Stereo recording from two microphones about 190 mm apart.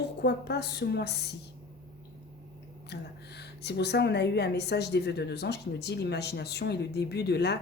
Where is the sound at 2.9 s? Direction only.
60° left (ahead or behind).